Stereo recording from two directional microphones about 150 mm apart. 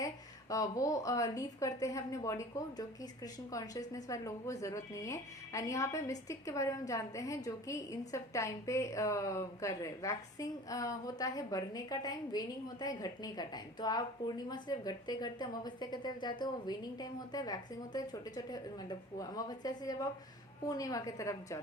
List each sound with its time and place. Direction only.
0.5 s a woman's voice: 25° left (ahead or behind)